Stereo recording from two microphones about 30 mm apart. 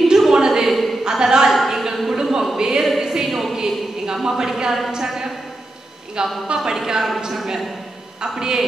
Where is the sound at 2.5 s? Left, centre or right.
Right.